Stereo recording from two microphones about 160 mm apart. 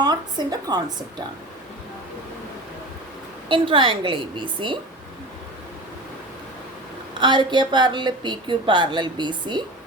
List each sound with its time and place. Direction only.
0.0 s speech: 25° right (ahead or behind)
3.5 s a woman's voice: 30° right (ahead or behind)
7.1 s a woman's voice: 30° right (ahead or behind)